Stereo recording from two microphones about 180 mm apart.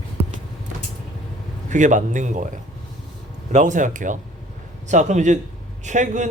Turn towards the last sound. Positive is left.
turn(degrees=-45)  # may be behind; listen again after turning